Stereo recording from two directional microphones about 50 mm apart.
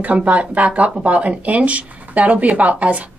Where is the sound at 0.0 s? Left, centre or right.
Right.